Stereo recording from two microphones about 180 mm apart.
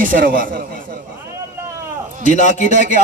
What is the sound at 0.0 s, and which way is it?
Speech, 50° right (ahead or behind).